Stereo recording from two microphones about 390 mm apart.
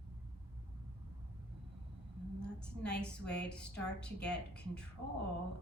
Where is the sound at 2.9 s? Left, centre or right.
Centre.